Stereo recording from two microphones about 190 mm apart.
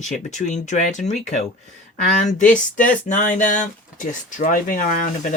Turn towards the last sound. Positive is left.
turn(degrees=40)  # may be behind; listen again after turning